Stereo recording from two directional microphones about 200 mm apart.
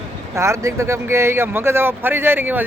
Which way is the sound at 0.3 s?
15° right (ahead or behind).